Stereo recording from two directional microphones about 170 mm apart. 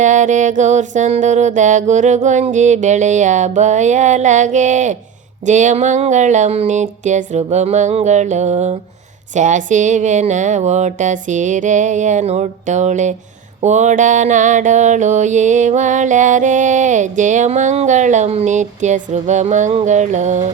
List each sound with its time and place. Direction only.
0.0 s mantra: 45° right (ahead or behind)